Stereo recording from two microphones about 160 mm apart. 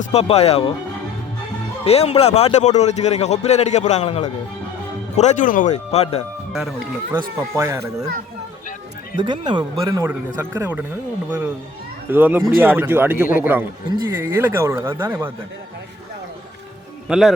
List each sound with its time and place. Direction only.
0.0 s speech: 40° left (ahead or behind)
1.8 s a man's voice: 40° left (ahead or behind)
6.5 s speech: centre (ahead or behind)
7.1 s speech: 15° right (ahead or behind)
9.1 s a man's voice: 30° right (ahead or behind); by 15.3 s 15° right (ahead or behind)
17.1 s a man's voice: centre (ahead or behind)